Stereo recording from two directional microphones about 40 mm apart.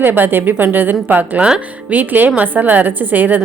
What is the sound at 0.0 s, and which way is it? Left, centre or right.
A woman's voice, right.